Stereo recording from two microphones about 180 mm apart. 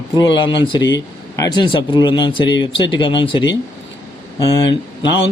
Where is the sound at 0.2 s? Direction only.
25° left (ahead or behind).